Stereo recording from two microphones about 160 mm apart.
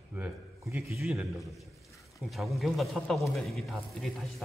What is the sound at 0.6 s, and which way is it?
Speech, 15° right (ahead or behind).